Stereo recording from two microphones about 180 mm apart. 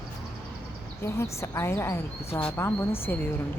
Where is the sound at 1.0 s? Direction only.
15° left (ahead or behind).